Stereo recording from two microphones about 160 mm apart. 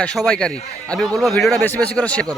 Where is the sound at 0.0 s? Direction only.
5° left (ahead or behind).